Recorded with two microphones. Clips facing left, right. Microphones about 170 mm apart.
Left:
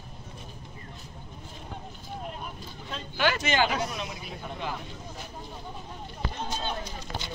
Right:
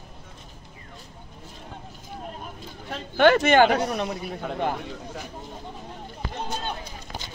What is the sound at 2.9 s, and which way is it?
A man's voice, 55° right (ahead or behind).